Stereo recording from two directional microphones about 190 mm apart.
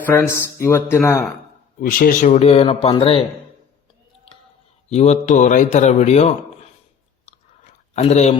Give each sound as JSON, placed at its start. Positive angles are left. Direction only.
{"t": 0.0, "sound": "speech", "side_deg": 15}
{"t": 1.8, "sound": "speech", "side_deg": 50}
{"t": 4.9, "sound": "speech", "side_deg": 35}
{"t": 7.9, "sound": "speech", "side_deg": 35}